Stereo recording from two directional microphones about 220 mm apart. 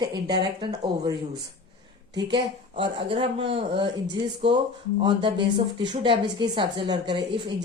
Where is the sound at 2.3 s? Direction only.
25° right (ahead or behind).